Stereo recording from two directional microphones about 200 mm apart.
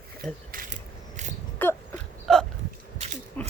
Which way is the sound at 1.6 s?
10° left (ahead or behind).